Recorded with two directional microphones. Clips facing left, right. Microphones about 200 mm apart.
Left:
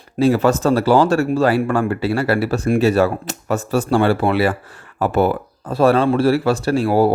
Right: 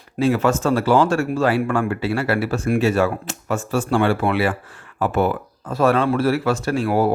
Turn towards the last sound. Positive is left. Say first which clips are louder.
# left 4 dB
turn(degrees=30)  # may be behind; listen again after turning